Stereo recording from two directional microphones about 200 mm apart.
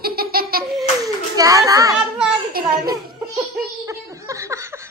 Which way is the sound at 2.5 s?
50° right (ahead or behind).